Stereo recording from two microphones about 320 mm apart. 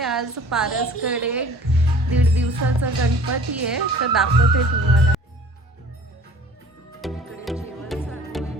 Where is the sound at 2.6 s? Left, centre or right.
Right.